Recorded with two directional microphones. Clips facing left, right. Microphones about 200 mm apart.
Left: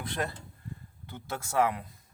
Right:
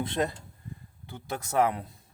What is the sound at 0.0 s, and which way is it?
Speech, 20° right (ahead or behind).